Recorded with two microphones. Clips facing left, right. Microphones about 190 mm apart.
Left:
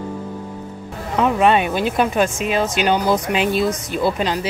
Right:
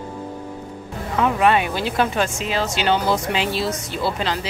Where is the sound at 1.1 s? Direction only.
20° left (ahead or behind).